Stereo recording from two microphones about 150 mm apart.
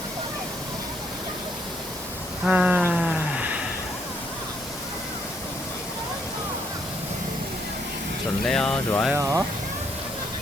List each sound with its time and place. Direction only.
2.5 s a sound: 10° right (ahead or behind)
8.4 s speech: 5° left (ahead or behind)
9.1 s speech: 20° right (ahead or behind)